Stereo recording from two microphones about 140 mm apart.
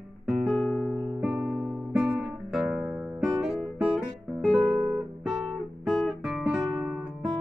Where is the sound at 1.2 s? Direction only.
5° right (ahead or behind).